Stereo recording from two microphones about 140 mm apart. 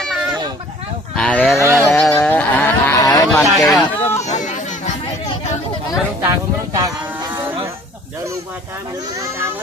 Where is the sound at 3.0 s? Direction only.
25° left (ahead or behind).